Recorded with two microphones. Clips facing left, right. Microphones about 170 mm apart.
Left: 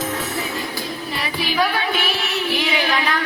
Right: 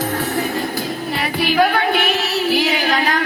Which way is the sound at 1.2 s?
55° right (ahead or behind).